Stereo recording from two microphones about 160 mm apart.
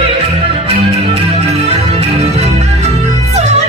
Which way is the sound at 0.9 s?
40° right (ahead or behind).